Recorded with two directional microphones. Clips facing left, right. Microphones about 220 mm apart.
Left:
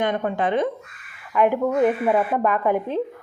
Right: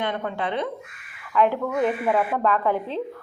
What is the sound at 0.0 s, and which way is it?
Speech, 45° left (ahead or behind).